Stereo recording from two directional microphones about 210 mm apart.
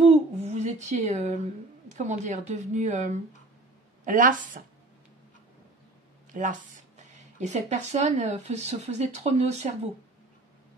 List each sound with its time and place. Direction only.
0.0 s a sound: 30° right (ahead or behind)
1.9 s speech: 35° right (ahead or behind)
6.3 s speech: 35° right (ahead or behind)